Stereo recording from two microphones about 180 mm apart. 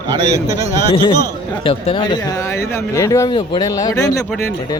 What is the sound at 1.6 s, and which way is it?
Speech, 30° left (ahead or behind).